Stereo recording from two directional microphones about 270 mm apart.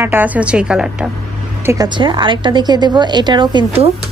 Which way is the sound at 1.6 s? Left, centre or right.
Centre.